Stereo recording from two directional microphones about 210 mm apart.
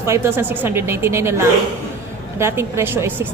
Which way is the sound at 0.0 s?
10° right (ahead or behind).